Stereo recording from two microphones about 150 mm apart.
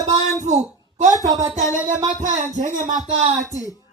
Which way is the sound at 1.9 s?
55° right (ahead or behind).